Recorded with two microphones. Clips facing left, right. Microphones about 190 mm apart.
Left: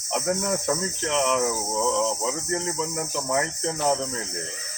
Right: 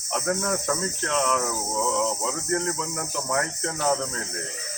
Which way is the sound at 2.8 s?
10° left (ahead or behind).